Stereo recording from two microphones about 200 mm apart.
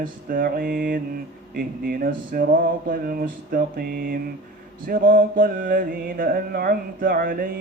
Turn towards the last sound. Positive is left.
turn(degrees=-45)  # may be behind; listen again after turning